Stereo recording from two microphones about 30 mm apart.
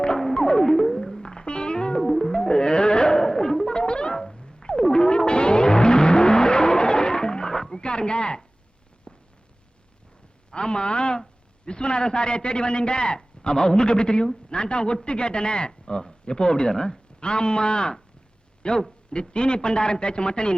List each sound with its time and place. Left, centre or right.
0.3 s music: left
1.5 s music: left
2.0 s music: centre
2.3 s music: left
3.2 s music: centre
3.7 s music: left
4.1 s music: centre
7.8 s a sound: left
10.5 s a sound: left
11.6 s speech: left